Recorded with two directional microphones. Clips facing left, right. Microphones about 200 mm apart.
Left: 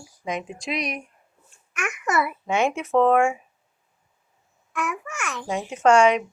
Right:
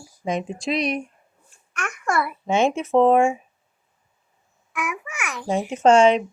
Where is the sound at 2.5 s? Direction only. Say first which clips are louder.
Right 4 dB; 20° right (ahead or behind).